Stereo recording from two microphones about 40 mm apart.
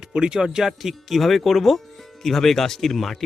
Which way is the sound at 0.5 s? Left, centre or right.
Centre.